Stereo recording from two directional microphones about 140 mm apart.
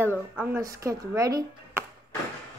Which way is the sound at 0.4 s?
20° right (ahead or behind).